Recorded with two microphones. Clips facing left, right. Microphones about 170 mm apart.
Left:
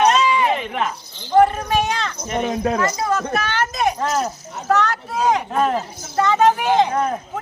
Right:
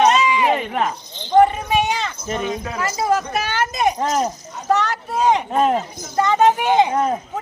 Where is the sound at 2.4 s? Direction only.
50° left (ahead or behind).